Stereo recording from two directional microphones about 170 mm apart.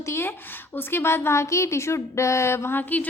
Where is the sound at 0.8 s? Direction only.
15° left (ahead or behind).